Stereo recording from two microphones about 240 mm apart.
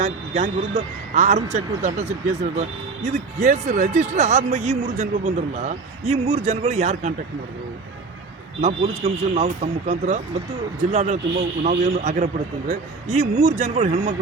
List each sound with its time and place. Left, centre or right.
0.0 s speech: right
8.6 s speech: right